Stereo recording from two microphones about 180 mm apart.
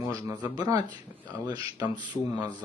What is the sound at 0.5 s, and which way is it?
Speech, 20° right (ahead or behind).